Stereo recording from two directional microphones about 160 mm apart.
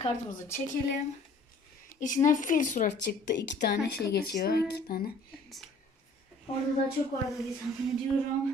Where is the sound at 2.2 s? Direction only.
55° left (ahead or behind).